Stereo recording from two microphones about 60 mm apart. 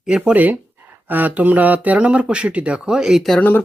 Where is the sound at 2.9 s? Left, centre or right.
Centre.